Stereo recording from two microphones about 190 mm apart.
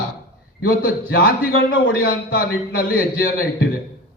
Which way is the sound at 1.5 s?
90° left.